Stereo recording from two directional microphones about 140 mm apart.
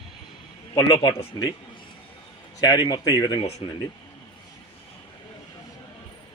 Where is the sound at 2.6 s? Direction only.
30° left (ahead or behind).